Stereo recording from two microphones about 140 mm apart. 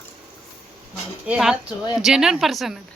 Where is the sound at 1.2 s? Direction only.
5° right (ahead or behind).